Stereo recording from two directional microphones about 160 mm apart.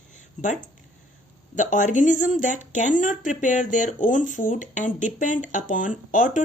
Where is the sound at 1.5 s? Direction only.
55° left (ahead or behind).